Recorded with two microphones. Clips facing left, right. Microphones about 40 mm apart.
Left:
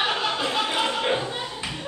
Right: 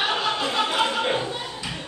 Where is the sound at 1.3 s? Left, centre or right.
Centre.